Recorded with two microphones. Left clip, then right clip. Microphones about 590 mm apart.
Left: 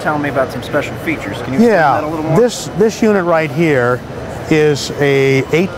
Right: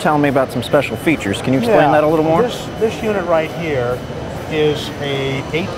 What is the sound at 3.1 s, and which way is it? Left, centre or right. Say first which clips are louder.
Speech: left 3 dB; left.